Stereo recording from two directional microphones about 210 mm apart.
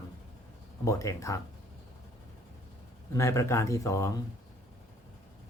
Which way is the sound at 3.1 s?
15° left (ahead or behind).